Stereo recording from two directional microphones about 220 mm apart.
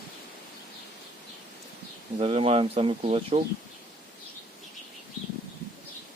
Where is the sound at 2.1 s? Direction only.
25° right (ahead or behind).